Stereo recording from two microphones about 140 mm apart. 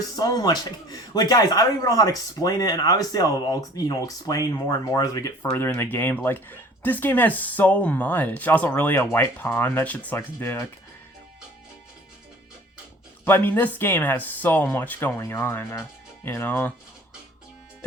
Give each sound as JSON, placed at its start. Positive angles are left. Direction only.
{"t": 0.2, "sound": "speech", "side_deg": 30}
{"t": 13.2, "sound": "speech", "side_deg": 15}